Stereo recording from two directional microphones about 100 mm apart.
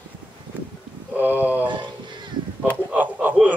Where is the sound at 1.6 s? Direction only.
50° right (ahead or behind).